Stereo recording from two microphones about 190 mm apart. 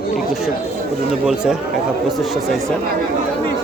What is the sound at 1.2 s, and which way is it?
Speech, 5° right (ahead or behind).